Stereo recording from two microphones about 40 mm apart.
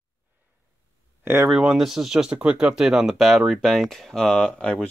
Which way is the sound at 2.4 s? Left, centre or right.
Right.